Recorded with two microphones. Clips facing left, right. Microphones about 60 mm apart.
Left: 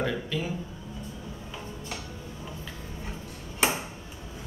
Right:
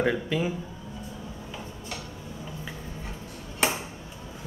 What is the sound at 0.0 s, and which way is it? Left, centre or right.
Speech, right.